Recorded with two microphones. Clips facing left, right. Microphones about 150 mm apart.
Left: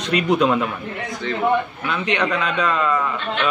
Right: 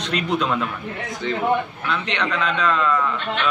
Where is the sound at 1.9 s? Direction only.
10° left (ahead or behind).